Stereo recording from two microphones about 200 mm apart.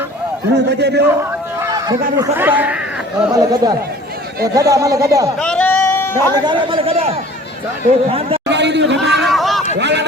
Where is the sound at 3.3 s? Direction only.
20° right (ahead or behind).